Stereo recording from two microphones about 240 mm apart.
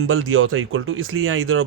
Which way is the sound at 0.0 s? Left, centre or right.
Right.